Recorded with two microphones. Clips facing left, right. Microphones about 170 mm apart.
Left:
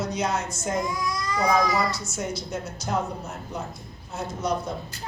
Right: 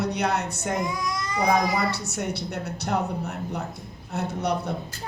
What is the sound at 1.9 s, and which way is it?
A woman's voice, 65° right (ahead or behind).